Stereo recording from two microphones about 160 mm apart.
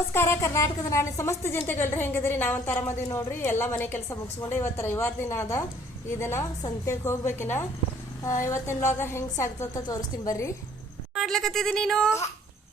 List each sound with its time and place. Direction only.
0.1 s a woman's voice: 15° left (ahead or behind)
11.1 s speech: centre (ahead or behind)